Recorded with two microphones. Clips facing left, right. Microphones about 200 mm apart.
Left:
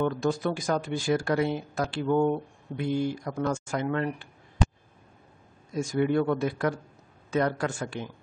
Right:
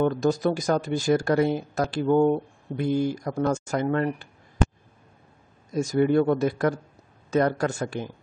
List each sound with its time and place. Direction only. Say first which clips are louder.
0.0 s speech: right 4 dB; 40° right (ahead or behind)
5.8 s speech: right 4 dB; 40° right (ahead or behind)